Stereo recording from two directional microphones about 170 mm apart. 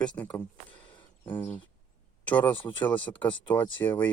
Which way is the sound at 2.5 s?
30° left (ahead or behind).